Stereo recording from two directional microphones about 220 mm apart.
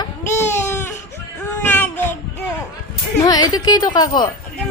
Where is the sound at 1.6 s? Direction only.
10° left (ahead or behind).